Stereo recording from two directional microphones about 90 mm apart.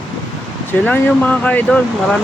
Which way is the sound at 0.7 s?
20° left (ahead or behind).